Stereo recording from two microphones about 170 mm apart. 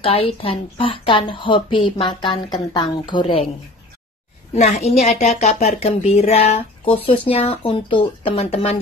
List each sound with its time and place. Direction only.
0.0 s a woman's voice: 35° left (ahead or behind)
4.6 s speech: 40° left (ahead or behind)